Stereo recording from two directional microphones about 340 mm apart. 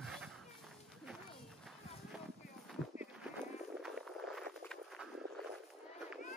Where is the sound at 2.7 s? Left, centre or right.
Centre.